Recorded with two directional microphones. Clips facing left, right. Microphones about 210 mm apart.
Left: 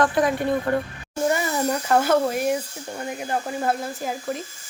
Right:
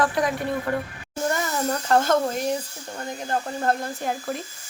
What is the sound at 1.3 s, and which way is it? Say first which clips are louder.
Speech: left 2 dB; 10° left (ahead or behind).